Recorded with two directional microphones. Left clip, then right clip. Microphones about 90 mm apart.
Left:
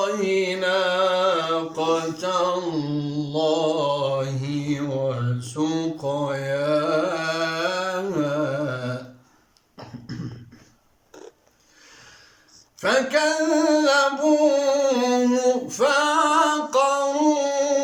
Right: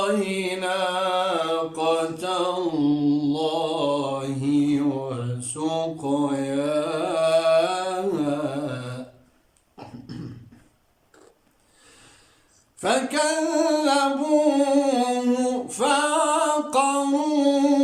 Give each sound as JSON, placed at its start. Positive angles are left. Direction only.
{"t": 0.0, "sound": "mantra", "side_deg": -35}
{"t": 12.8, "sound": "singing", "side_deg": -35}